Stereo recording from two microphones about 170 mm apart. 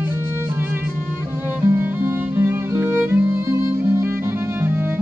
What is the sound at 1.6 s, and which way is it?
Music, 15° right (ahead or behind).